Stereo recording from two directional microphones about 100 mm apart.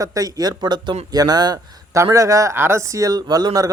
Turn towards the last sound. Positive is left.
turn(degrees=-40)  # may be behind; listen again after turning